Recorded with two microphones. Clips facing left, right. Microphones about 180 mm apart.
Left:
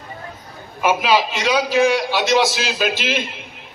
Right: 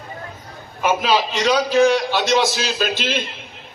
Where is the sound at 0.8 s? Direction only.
10° left (ahead or behind).